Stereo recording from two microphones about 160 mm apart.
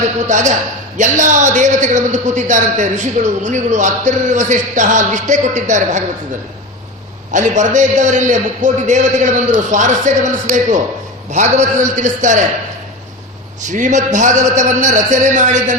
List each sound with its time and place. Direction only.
0.3 s a man's voice: 50° right (ahead or behind)
7.3 s a man's voice: 50° right (ahead or behind)
13.7 s a man's voice: 50° right (ahead or behind)